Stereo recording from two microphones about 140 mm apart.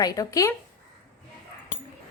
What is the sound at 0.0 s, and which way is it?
Speech, 25° left (ahead or behind).